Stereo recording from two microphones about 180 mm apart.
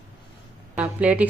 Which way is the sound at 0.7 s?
5° right (ahead or behind).